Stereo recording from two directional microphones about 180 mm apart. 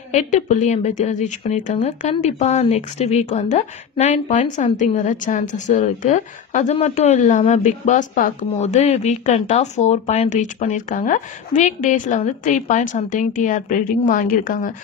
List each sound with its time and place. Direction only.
0.1 s a woman's voice: 40° left (ahead or behind)